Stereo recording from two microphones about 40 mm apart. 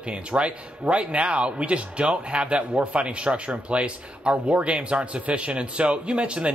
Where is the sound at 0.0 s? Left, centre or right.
Right.